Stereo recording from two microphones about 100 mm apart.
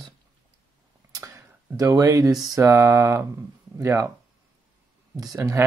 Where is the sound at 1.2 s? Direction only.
30° right (ahead or behind).